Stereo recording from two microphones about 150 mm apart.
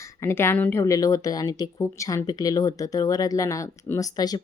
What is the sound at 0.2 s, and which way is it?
Speech, 15° left (ahead or behind).